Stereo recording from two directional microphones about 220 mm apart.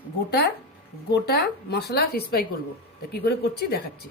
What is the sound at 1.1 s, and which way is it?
Speech, 50° left (ahead or behind).